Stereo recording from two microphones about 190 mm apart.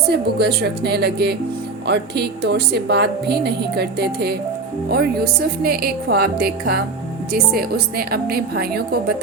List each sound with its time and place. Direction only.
0.1 s a woman's voice: 60° right (ahead or behind)